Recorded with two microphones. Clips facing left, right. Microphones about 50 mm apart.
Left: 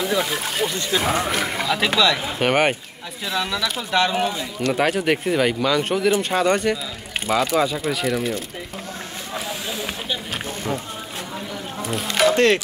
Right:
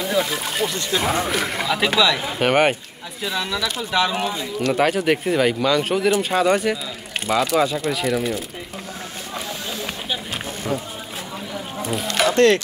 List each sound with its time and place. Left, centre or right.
0.0 s speech: centre
11.9 s speech: centre
12.4 s speech: centre